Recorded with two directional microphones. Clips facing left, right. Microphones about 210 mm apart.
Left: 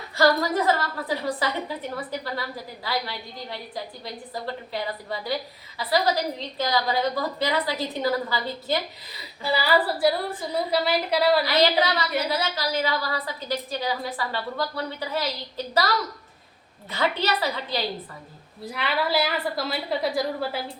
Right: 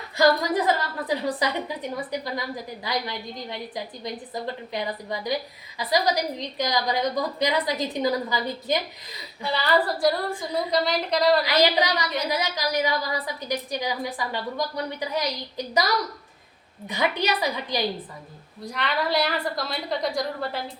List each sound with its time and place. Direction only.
0.2 s a woman's voice: 15° right (ahead or behind)
9.4 s a woman's voice: 5° left (ahead or behind)
11.4 s a woman's voice: 15° right (ahead or behind)
16.9 s a woman's voice: 15° right (ahead or behind)
18.6 s a woman's voice: 5° left (ahead or behind)